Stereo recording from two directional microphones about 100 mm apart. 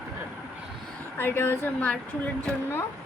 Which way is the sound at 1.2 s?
25° left (ahead or behind).